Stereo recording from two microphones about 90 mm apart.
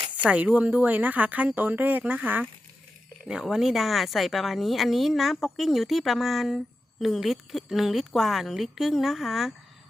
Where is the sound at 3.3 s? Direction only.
5° right (ahead or behind).